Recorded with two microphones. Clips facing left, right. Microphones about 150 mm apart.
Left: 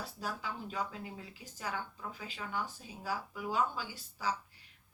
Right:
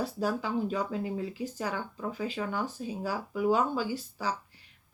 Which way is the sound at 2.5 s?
90° right.